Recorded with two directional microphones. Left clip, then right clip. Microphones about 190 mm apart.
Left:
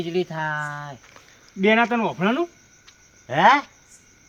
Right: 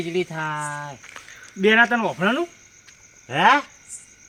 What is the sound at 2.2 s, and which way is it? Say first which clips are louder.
Cricket: right 1 dB; 30° left (ahead or behind).